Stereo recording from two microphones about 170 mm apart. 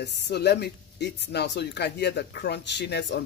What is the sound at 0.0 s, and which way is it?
Speech, 80° left.